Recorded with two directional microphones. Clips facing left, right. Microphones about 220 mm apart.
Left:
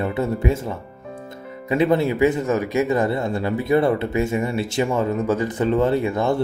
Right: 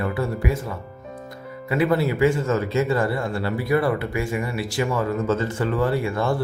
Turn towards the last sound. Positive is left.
turn(degrees=20)  # may be behind; listen again after turning